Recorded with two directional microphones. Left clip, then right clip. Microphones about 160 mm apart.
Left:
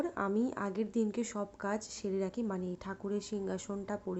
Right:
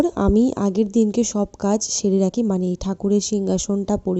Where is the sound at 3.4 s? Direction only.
55° right (ahead or behind).